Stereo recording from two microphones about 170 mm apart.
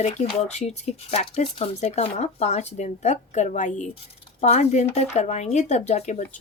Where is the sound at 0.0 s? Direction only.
40° left (ahead or behind).